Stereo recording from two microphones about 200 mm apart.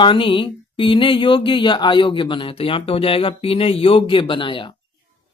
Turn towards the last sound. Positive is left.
turn(degrees=25)  # may be behind; listen again after turning